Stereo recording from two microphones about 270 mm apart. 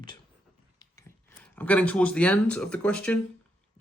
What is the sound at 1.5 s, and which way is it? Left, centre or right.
A man's voice, centre.